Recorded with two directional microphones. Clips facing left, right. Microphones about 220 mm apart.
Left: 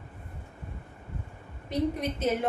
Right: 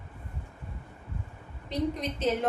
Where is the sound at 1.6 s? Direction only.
10° left (ahead or behind).